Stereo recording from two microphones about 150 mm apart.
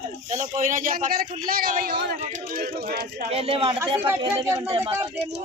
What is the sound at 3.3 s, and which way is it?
A man's voice, 40° right (ahead or behind).